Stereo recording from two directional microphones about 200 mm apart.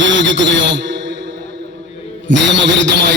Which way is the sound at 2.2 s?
65° right (ahead or behind).